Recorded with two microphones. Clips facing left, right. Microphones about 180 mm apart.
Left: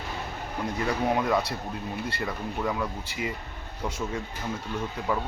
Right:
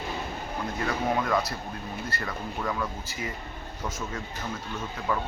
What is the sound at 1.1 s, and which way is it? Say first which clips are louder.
Speech: left 1 dB; 15° left (ahead or behind).